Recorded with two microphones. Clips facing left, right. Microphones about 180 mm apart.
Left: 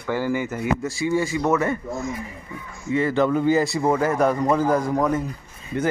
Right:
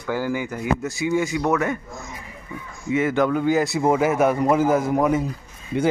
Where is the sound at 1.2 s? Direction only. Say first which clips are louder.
Even; centre (ahead or behind).